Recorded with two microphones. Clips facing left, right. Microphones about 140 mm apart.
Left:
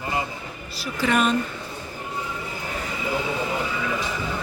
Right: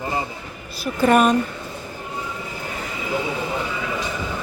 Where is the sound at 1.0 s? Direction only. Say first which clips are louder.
Right 6 dB; 50° right (ahead or behind).